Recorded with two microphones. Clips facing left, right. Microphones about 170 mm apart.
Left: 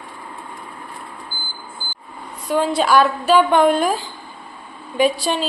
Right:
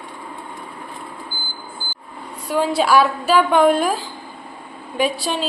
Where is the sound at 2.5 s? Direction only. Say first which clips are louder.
Even; 5° right (ahead or behind).